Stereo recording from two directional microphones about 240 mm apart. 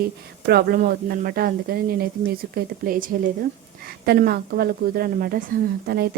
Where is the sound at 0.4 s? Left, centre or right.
Right.